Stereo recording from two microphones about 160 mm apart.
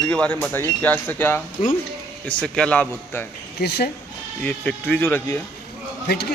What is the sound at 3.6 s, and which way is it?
Speech, 90° left.